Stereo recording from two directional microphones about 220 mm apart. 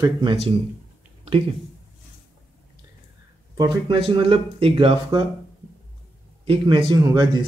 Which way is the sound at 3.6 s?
20° right (ahead or behind).